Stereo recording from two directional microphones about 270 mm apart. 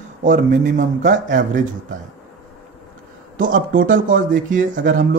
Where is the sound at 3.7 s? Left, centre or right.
Right.